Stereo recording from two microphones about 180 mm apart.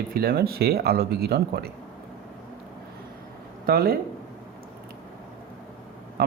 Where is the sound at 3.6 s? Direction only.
55° right (ahead or behind).